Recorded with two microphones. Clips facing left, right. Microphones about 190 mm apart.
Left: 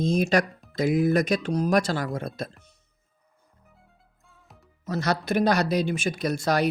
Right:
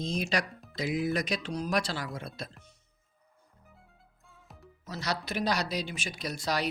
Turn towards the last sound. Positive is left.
turn(degrees=50)  # may be behind; listen again after turning